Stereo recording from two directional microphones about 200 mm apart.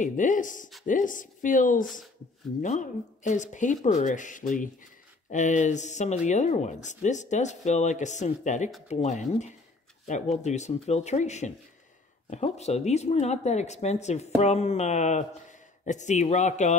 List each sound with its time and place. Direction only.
0.0 s speech: 40° left (ahead or behind)